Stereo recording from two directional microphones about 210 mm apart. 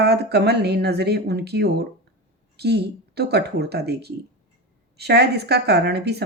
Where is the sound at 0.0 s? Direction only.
50° right (ahead or behind).